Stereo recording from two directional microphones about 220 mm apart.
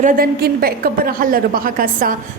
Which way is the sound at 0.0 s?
40° right (ahead or behind).